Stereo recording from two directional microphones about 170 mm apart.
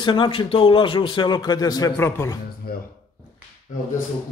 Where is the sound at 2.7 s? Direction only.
65° left (ahead or behind).